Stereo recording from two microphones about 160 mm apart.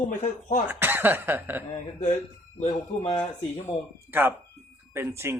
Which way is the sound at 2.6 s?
40° left (ahead or behind).